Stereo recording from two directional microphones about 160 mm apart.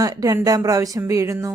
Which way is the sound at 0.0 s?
20° right (ahead or behind).